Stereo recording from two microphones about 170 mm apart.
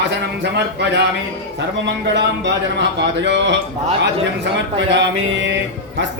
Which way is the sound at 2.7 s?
90° right.